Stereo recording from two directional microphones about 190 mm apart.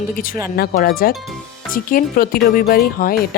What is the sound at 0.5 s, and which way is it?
Speech, 50° left (ahead or behind).